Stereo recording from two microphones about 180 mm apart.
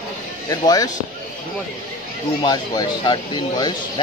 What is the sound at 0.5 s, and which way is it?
Speech, 20° left (ahead or behind).